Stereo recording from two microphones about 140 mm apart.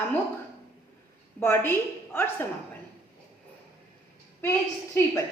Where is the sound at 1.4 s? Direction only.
15° left (ahead or behind).